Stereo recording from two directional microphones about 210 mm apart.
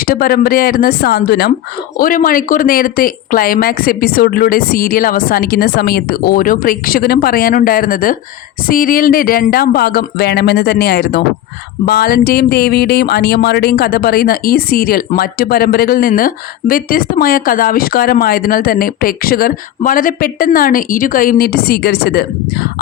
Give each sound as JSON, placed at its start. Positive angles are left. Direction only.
{"t": 0.0, "sound": "speech", "side_deg": 45}